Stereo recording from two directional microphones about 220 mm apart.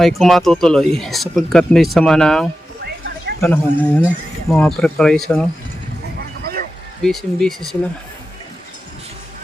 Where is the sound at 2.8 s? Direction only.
45° right (ahead or behind).